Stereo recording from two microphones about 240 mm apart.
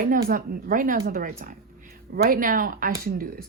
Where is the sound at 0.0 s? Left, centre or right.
Right.